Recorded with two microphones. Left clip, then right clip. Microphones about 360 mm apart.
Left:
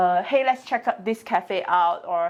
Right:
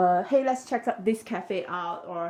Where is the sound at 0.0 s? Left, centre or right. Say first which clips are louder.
Left 3 dB; left.